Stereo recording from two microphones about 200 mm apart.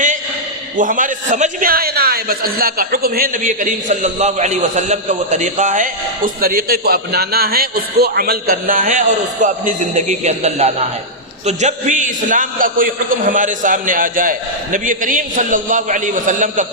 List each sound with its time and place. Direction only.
0.8 s a man's voice: 40° right (ahead or behind)